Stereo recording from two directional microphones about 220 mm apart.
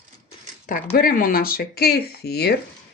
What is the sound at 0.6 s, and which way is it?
Speech, 40° left (ahead or behind).